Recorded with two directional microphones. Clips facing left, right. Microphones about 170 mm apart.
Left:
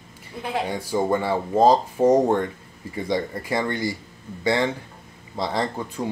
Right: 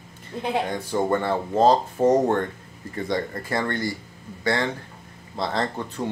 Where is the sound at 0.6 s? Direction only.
10° left (ahead or behind).